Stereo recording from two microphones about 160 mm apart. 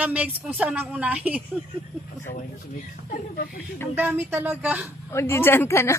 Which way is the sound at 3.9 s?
10° right (ahead or behind).